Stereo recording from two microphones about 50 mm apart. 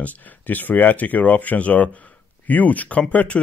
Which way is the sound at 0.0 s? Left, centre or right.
Left.